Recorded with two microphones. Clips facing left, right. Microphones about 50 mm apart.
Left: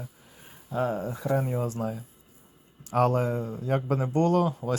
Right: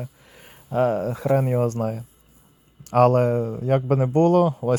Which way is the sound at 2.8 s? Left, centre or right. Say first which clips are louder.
Right 7 dB; right.